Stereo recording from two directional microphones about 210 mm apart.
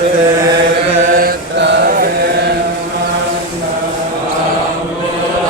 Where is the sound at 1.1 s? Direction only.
50° right (ahead or behind).